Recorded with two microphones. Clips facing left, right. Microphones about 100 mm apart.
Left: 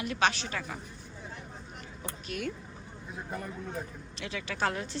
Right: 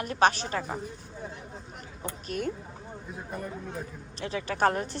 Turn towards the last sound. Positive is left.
turn(degrees=-45)  # may be behind; listen again after turning